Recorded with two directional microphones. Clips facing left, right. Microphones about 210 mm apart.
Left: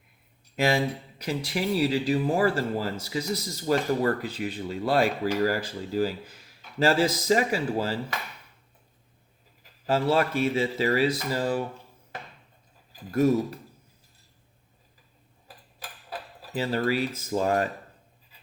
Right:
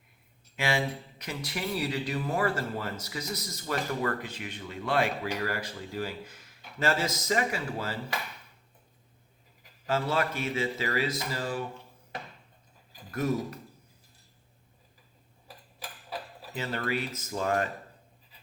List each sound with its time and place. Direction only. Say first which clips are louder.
0.5 s speech: left 5 dB; 40° left (ahead or behind)
9.8 s speech: left 5 dB; 35° left (ahead or behind)
13.1 s speech: left 8 dB; 30° left (ahead or behind)
16.6 s speech: left 6 dB; 35° left (ahead or behind)